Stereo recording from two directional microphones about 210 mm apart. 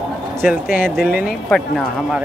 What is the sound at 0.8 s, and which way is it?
Speech, 5° right (ahead or behind).